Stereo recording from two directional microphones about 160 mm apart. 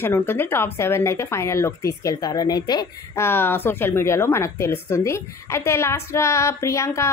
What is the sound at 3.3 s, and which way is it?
Speech, 15° left (ahead or behind).